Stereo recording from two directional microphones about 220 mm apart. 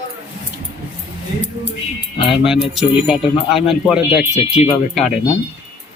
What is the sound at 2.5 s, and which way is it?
Speech, centre (ahead or behind).